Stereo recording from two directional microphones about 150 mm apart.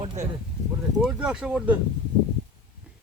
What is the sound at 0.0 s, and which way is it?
Speech, 40° right (ahead or behind).